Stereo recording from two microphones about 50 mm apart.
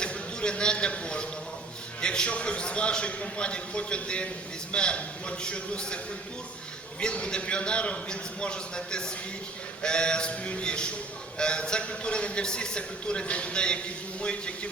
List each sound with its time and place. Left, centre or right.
0.0 s a man's voice: centre
7.0 s a man's voice: centre